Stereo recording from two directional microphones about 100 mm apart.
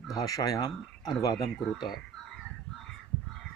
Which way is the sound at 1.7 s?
5° right (ahead or behind).